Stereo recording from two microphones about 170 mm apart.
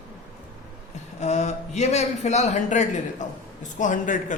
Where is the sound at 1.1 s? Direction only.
40° left (ahead or behind).